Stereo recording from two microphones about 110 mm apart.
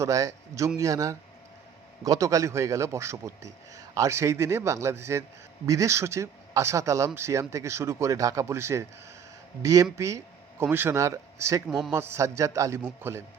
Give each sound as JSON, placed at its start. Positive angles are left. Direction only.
{"t": 0.0, "sound": "a man's voice", "side_deg": -30}